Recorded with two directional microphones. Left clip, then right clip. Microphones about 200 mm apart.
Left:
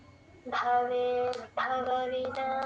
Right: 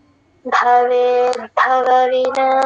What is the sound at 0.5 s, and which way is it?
Speech, 50° right (ahead or behind).